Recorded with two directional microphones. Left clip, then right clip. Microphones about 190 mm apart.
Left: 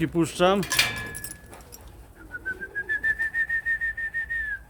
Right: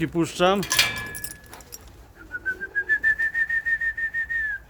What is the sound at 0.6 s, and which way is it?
Keys jangling, 50° right (ahead or behind).